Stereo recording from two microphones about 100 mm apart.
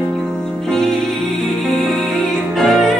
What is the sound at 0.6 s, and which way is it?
Music, 5° left (ahead or behind).